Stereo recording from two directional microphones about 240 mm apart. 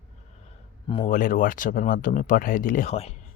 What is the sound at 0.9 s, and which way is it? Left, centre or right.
Speech, left.